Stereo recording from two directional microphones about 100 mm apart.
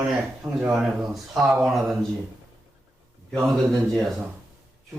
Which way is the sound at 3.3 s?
Centre (ahead or behind).